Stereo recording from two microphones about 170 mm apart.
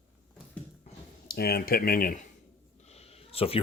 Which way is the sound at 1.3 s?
65° left (ahead or behind).